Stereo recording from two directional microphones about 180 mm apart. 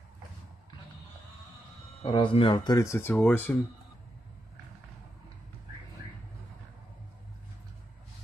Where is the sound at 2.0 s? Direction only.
30° left (ahead or behind); by 3.5 s 10° left (ahead or behind).